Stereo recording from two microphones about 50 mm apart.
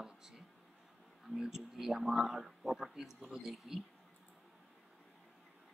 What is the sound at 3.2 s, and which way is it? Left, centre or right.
Speech, centre.